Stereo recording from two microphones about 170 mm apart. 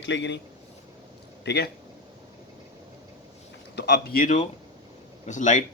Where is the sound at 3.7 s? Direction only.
80° left.